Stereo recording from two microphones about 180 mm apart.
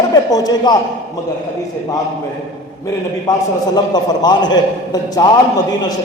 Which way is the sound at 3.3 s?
20° left (ahead or behind).